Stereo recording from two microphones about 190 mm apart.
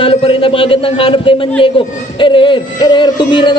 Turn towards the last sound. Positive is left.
turn(degrees=25)  # may be behind; listen again after turning